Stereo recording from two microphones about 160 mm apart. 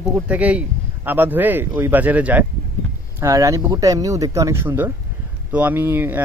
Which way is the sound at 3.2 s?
20° right (ahead or behind).